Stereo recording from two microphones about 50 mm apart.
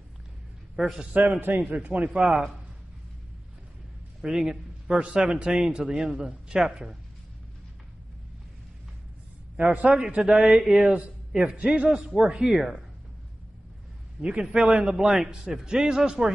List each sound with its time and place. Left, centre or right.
0.7 s a man's voice: centre
1.1 s a man's voice: right
1.8 s a man's voice: right
4.2 s a man's voice: centre
9.6 s a man's voice: right; by 10.9 s centre
10.9 s a man's voice: right
12.2 s a man's voice: centre
14.2 s a man's voice: centre